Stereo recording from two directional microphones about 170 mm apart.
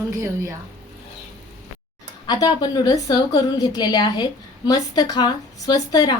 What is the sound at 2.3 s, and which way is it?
A woman's voice, 25° left (ahead or behind).